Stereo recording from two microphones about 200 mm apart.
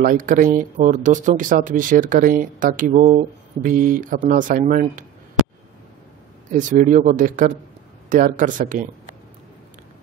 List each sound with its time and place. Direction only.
0.0 s speech: 40° right (ahead or behind)
6.5 s speech: 40° right (ahead or behind)